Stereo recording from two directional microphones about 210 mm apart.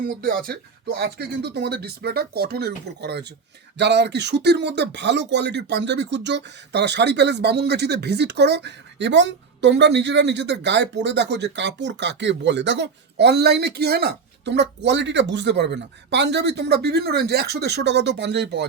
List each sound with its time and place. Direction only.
0.0 s speech: 45° right (ahead or behind)